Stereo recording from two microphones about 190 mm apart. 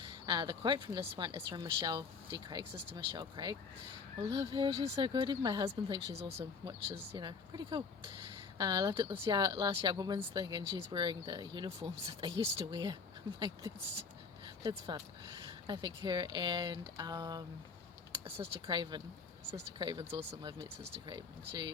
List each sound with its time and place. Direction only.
0.3 s a woman's voice: 25° right (ahead or behind)